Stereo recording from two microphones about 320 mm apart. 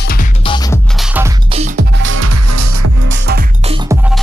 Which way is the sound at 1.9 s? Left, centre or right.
Right.